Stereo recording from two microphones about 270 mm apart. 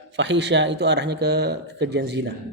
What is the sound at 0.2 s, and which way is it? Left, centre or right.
A man's voice, right.